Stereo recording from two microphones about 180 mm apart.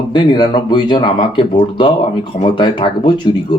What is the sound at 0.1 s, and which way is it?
Speech, 25° left (ahead or behind).